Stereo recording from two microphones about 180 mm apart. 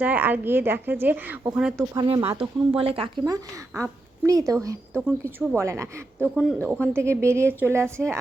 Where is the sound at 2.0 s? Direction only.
30° right (ahead or behind).